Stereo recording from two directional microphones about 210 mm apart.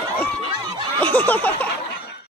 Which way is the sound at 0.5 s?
20° right (ahead or behind).